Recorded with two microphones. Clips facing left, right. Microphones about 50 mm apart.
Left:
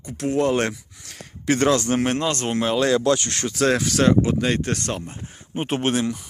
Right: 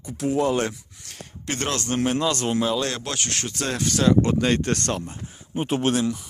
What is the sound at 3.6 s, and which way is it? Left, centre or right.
Speech, left.